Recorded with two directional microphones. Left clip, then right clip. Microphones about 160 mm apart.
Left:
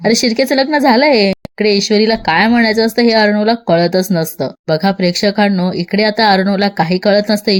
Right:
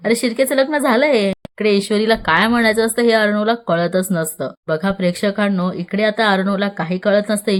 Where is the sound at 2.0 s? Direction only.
15° left (ahead or behind).